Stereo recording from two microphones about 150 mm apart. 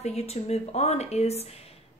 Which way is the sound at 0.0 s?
45° left (ahead or behind).